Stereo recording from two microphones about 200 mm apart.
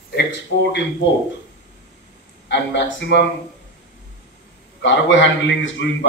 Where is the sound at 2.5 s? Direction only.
60° left (ahead or behind).